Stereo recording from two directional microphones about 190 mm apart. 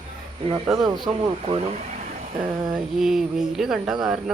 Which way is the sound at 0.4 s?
25° right (ahead or behind).